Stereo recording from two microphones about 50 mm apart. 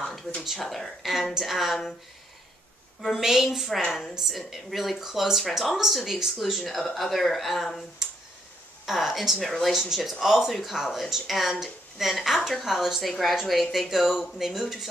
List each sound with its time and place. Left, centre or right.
0.6 s speech: centre
3.0 s speech: centre
8.8 s speech: centre